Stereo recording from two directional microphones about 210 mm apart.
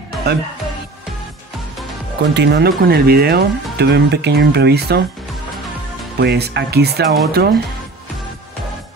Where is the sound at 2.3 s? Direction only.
50° right (ahead or behind).